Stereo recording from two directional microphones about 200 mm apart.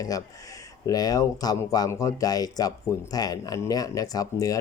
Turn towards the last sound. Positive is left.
turn(degrees=15)  # may be behind; listen again after turning